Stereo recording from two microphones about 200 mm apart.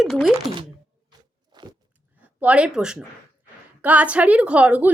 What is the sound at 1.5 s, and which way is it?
Biting, 20° right (ahead or behind).